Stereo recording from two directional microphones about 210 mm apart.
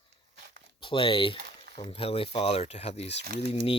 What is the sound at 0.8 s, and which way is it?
Speech, 25° left (ahead or behind).